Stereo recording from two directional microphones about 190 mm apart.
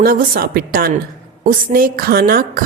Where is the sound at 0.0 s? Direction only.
50° right (ahead or behind).